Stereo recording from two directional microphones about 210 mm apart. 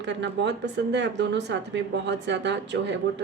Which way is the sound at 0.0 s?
55° right (ahead or behind).